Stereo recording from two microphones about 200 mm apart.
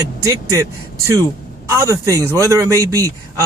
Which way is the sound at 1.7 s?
15° right (ahead or behind).